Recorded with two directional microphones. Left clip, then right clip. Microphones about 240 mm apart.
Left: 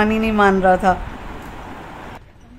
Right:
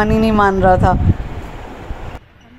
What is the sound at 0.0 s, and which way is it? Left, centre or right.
Speech, centre.